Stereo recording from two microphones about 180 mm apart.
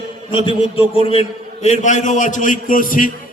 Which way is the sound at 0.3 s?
30° left (ahead or behind).